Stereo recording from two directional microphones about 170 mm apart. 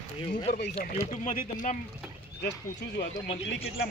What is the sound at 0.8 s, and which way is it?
Speech, 45° left (ahead or behind).